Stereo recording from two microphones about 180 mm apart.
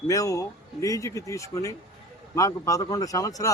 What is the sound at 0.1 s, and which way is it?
A man's voice, 20° left (ahead or behind).